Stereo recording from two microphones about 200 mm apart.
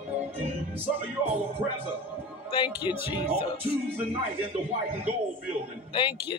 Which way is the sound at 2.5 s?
25° left (ahead or behind).